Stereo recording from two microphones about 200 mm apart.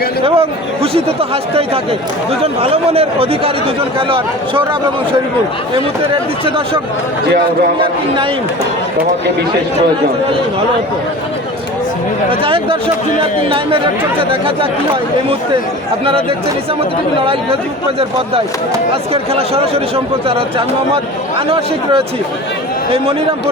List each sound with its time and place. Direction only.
0.3 s speech: 30° right (ahead or behind)
7.8 s speech: 25° right (ahead or behind)
12.3 s speech: 30° right (ahead or behind)
19.1 s speech: 30° right (ahead or behind)
21.3 s speech: 25° right (ahead or behind)